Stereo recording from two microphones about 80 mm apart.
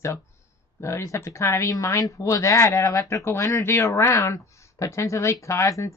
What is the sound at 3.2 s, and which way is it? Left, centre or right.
Speech, left.